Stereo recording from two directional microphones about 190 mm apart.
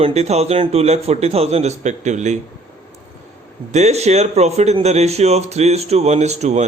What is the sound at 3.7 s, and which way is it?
Speech, 35° right (ahead or behind).